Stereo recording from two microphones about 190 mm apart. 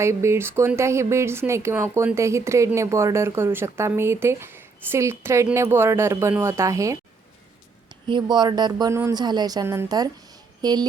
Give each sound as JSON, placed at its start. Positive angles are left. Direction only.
{"t": 0.0, "sound": "a woman's voice", "side_deg": -15}